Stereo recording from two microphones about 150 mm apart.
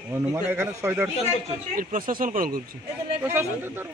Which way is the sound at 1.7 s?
65° right (ahead or behind).